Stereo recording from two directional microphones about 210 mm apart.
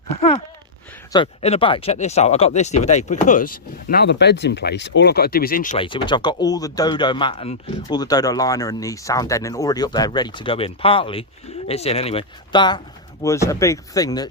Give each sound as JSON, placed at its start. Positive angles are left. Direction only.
{"t": 0.2, "sound": "a sound", "side_deg": 30}
{"t": 1.1, "sound": "speech", "side_deg": 25}
{"t": 5.7, "sound": "speech", "side_deg": 25}